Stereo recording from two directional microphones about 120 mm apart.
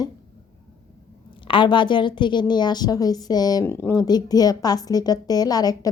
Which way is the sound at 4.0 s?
35° left (ahead or behind).